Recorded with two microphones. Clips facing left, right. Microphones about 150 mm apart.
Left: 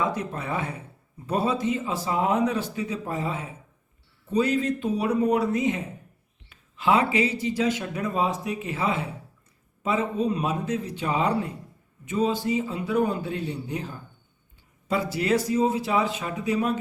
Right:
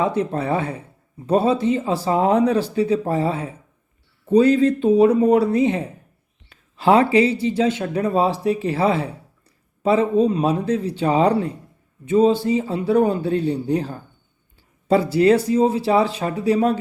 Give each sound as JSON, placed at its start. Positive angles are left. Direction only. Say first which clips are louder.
{"t": 0.0, "sound": "speech", "louder": "right 7 dB", "side_deg": -30}